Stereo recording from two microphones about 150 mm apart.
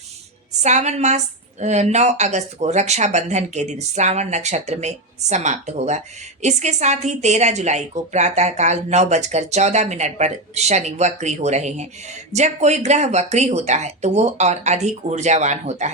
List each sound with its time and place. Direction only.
0.5 s a woman's voice: 50° right (ahead or behind)